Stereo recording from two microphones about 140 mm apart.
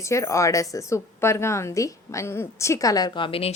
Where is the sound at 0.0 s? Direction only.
20° left (ahead or behind).